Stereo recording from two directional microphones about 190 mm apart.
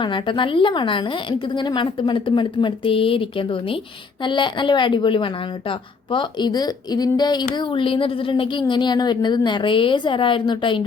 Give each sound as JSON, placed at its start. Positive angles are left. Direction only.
{"t": 0.0, "sound": "a woman's voice", "side_deg": 25}